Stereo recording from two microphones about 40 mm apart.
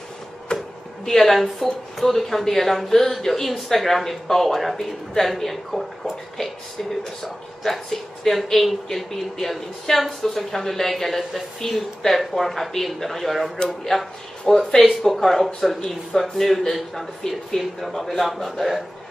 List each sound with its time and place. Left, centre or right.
0.5 s a sound: left
1.0 s speech: centre
7.2 s speech: centre